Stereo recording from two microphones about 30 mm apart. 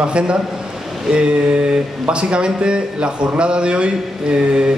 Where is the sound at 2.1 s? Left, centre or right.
Right.